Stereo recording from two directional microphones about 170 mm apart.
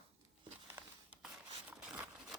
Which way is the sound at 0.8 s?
15° right (ahead or behind).